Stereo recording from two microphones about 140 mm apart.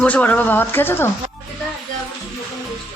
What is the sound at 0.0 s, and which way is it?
Speech, 10° left (ahead or behind).